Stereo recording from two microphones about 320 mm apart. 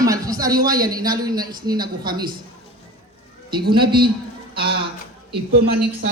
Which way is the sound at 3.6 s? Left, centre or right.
Right.